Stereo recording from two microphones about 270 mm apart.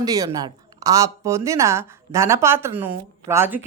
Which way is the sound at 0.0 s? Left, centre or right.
Centre.